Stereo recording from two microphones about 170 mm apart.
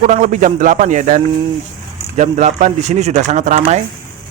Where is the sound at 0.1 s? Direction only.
45° right (ahead or behind).